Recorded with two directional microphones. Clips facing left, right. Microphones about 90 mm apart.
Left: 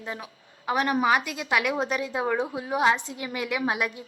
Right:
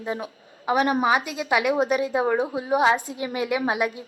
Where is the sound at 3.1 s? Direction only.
30° right (ahead or behind).